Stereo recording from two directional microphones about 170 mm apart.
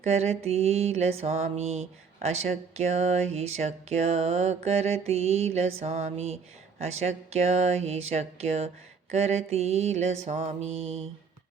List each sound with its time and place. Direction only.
0.0 s mantra: 40° right (ahead or behind)